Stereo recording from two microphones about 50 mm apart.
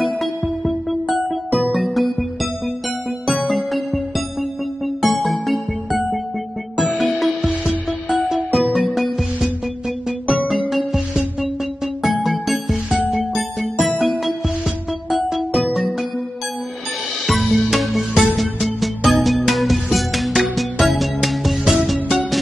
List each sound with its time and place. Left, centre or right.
1.7 s music: centre
3.3 s music: centre
7.1 s music: centre
7.4 s music: centre
12.1 s music: centre
15.2 s music: centre
17.3 s music: centre